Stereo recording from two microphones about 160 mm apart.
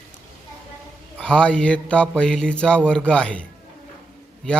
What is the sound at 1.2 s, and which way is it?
Speech, 5° left (ahead or behind).